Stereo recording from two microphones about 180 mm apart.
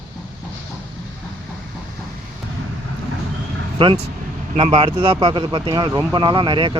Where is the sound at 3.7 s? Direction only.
30° right (ahead or behind).